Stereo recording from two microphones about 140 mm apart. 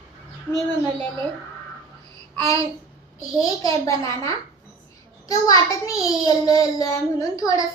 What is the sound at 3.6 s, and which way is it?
Speech, 25° left (ahead or behind).